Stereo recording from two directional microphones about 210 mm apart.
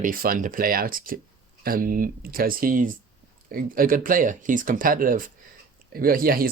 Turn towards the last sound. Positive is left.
turn(degrees=-45)  # may be behind; listen again after turning